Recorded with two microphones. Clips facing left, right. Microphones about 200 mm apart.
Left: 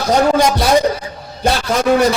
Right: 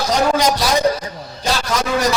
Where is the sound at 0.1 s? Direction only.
55° left (ahead or behind).